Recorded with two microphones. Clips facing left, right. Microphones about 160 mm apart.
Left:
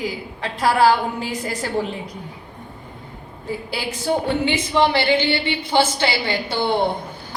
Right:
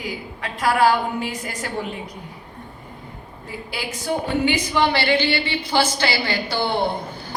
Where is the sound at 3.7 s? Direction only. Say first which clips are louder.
Left 2 dB; 30° left (ahead or behind).